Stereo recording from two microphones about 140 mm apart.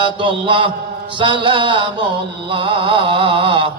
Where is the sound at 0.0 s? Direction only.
35° right (ahead or behind).